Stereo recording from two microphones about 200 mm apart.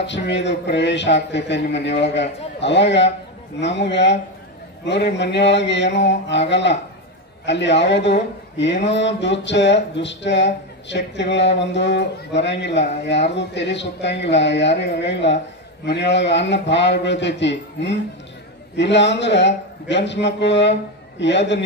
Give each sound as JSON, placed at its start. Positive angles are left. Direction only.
{"t": 0.0, "sound": "speech", "side_deg": 60}